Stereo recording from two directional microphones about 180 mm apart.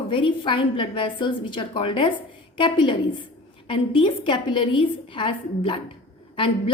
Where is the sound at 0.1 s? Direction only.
30° left (ahead or behind).